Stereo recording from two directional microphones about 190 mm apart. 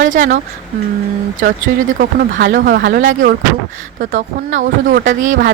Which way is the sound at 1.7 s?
45° right (ahead or behind).